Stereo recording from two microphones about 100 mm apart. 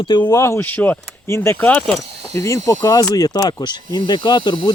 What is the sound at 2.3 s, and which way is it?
Speech, 30° left (ahead or behind).